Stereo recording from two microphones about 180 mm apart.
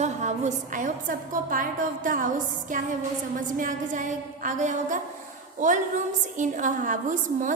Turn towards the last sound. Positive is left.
turn(degrees=-45)  # may be behind; listen again after turning